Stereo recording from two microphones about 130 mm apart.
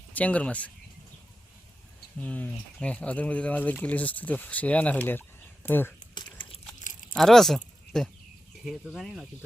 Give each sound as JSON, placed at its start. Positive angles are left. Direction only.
{"t": 0.2, "sound": "speech", "side_deg": 10}
{"t": 2.2, "sound": "speech", "side_deg": 10}
{"t": 6.9, "sound": "biting", "side_deg": 80}
{"t": 7.2, "sound": "speech", "side_deg": 0}